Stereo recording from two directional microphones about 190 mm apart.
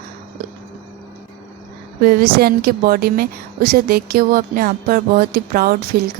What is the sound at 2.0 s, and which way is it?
A woman's voice, 55° right (ahead or behind).